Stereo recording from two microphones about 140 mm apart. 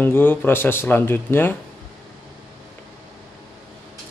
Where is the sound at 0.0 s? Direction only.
15° left (ahead or behind).